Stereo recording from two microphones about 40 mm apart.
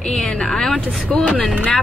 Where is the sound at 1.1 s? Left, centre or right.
Centre.